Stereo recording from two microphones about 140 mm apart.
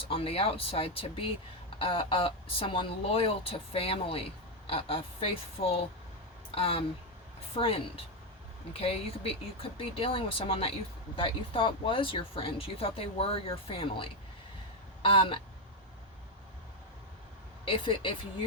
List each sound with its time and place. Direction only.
0.1 s speech: 45° left (ahead or behind)
17.7 s speech: 40° left (ahead or behind)